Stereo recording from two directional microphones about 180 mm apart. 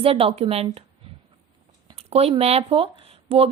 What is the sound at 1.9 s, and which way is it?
Speech, 35° right (ahead or behind).